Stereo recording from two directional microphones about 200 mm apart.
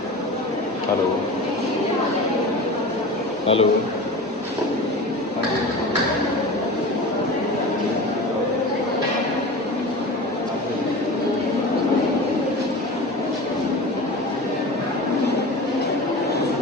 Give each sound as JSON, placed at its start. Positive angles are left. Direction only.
{"t": 3.4, "sound": "speech", "side_deg": 30}